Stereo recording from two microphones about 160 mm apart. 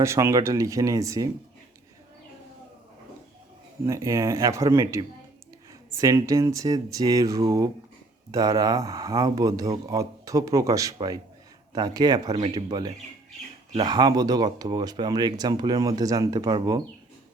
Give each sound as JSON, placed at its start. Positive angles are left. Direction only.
{"t": 0.0, "sound": "speech", "side_deg": -15}
{"t": 3.8, "sound": "speech", "side_deg": -20}
{"t": 6.0, "sound": "speech", "side_deg": -20}